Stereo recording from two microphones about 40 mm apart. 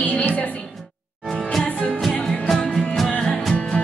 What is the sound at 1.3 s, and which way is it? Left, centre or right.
Music, centre.